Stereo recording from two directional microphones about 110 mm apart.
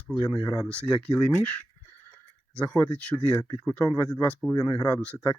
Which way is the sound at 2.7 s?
20° left (ahead or behind).